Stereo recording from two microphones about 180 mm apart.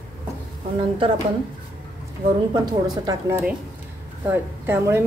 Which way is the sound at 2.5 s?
20° right (ahead or behind).